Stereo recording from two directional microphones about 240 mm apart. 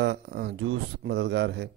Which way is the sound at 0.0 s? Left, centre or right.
Right.